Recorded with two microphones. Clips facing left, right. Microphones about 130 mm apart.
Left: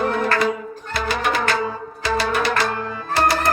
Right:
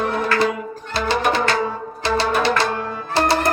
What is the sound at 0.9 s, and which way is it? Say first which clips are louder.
Music: right 3 dB; 30° right (ahead or behind).